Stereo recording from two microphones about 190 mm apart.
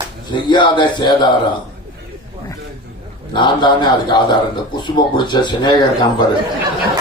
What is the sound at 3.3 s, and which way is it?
Speech, 25° left (ahead or behind).